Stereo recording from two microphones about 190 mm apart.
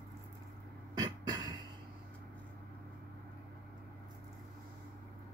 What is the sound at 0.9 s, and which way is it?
Beatboxing, 20° right (ahead or behind).